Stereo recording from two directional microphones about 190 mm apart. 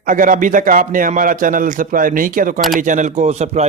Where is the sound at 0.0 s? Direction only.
45° right (ahead or behind).